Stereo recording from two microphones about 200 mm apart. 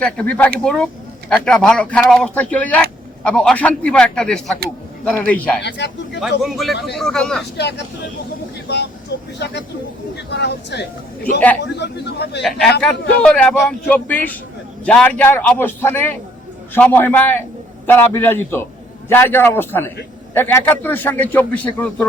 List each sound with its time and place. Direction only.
0.0 s a man's voice: 5° left (ahead or behind)
5.6 s speech: 60° left (ahead or behind)
6.1 s speech: centre (ahead or behind)
8.6 s speech: 55° left (ahead or behind)
12.4 s a man's voice: centre (ahead or behind)